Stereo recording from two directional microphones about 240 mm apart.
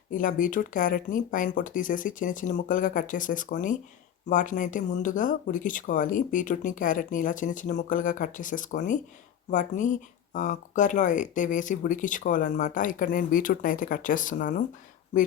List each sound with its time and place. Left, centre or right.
0.1 s speech: left